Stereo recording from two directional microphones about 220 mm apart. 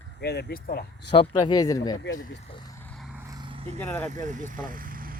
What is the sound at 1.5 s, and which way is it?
Speech, 15° left (ahead or behind).